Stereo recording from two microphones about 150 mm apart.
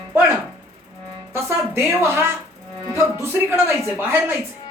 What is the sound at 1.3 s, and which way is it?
Speech, 15° right (ahead or behind).